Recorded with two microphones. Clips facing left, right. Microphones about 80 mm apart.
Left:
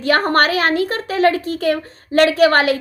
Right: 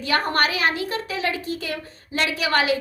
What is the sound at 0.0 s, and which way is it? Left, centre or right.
Speech, left.